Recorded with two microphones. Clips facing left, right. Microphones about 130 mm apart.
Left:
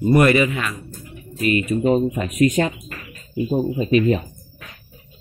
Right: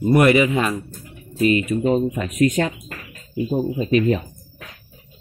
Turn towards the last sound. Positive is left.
turn(degrees=10)  # may be behind; listen again after turning